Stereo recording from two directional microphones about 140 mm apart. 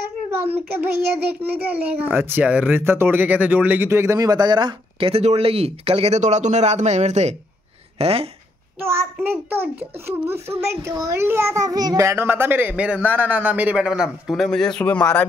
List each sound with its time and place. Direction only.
0.3 s a child's voice: 10° right (ahead or behind); by 8.3 s 45° right (ahead or behind)
8.8 s a child's voice: 15° right (ahead or behind); by 15.2 s 10° left (ahead or behind)